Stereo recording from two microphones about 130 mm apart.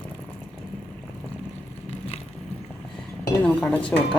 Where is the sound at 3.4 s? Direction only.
10° left (ahead or behind).